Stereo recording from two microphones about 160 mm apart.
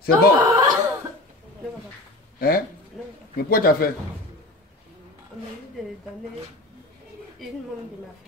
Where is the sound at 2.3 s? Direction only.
70° left (ahead or behind).